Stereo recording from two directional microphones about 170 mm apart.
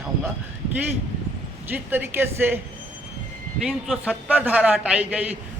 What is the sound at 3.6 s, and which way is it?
Speech, 5° right (ahead or behind).